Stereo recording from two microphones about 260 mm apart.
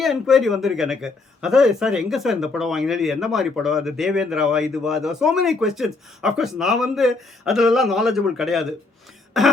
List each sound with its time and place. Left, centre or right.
0.0 s a man's voice: centre